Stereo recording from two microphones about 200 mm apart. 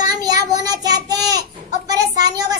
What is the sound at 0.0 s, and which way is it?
Child singing, 20° right (ahead or behind).